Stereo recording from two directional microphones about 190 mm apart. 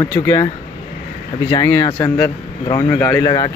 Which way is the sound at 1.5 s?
15° left (ahead or behind).